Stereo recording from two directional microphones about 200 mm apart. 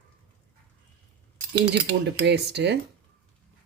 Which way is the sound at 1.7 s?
60° right (ahead or behind).